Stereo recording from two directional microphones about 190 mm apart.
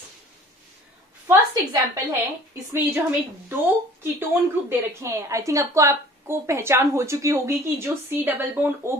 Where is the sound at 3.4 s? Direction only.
10° right (ahead or behind).